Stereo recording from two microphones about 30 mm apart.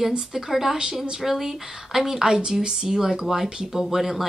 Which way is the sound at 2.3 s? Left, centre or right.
Right.